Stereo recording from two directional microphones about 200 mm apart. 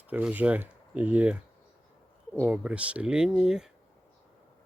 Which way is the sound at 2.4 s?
5° right (ahead or behind).